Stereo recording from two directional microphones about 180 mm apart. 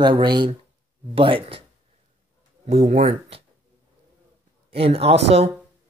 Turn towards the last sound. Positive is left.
turn(degrees=-35)  # may be behind; listen again after turning